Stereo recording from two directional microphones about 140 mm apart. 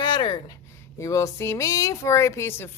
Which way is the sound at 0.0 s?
35° left (ahead or behind).